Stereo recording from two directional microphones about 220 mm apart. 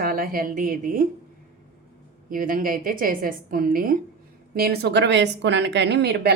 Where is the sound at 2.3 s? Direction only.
40° right (ahead or behind).